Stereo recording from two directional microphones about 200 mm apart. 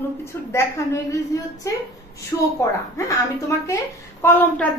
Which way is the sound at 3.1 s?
15° left (ahead or behind).